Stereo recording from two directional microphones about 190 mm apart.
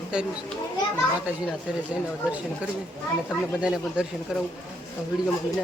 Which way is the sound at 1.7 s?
5° right (ahead or behind).